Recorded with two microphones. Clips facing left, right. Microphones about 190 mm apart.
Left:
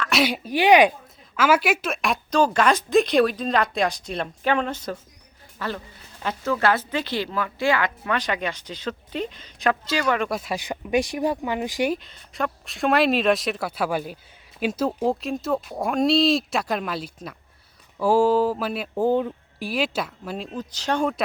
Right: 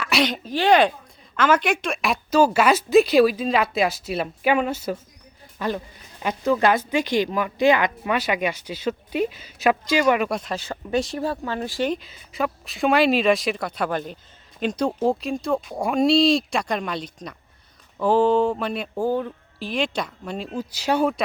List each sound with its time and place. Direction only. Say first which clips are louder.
0.0 s a woman's voice: even; centre (ahead or behind); by 10.2 s 15° right (ahead or behind)
10.2 s a woman's voice: right 1 dB; centre (ahead or behind)
10.5 s speech: left 1 dB; 15° left (ahead or behind)
12.0 s a woman's voice: right 2 dB; 5° right (ahead or behind)
18.9 s speech: left 4 dB; 20° left (ahead or behind); by 20.5 s 5° left (ahead or behind)
20.6 s a woman's voice: right 3 dB; 10° right (ahead or behind)